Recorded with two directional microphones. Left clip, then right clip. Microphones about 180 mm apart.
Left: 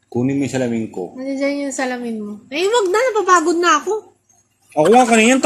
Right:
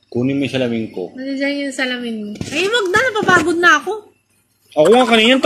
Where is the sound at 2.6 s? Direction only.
5° right (ahead or behind).